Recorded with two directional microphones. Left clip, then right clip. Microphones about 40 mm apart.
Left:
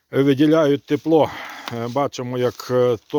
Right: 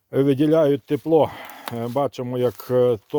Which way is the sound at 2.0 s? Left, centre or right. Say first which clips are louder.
Left 1 dB; centre.